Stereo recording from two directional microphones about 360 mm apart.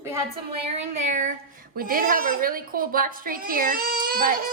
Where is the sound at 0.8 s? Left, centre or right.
Centre.